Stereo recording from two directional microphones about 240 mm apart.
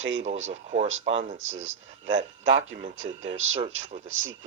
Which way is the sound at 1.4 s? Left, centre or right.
Right.